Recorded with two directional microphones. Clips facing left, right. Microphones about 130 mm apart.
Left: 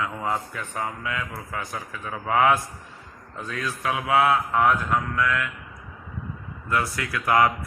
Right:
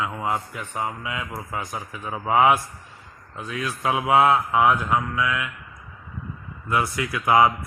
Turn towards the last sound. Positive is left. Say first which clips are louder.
# right 2 dB
turn(degrees=-15)  # may be behind; listen again after turning